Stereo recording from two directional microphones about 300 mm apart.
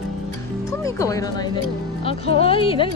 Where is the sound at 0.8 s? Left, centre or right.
Centre.